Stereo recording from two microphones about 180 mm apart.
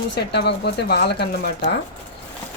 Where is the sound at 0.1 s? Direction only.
70° left (ahead or behind).